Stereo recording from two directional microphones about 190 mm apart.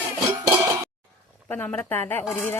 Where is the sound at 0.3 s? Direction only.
15° right (ahead or behind).